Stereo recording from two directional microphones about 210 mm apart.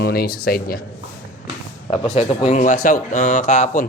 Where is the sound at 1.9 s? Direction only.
25° left (ahead or behind).